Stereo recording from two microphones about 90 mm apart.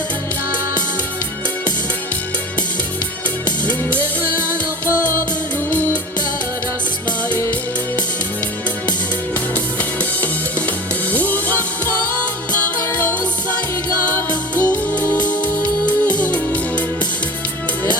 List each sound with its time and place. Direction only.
3.7 s music: 15° left (ahead or behind)
11.1 s music: 20° left (ahead or behind)
13.0 s music: 20° left (ahead or behind)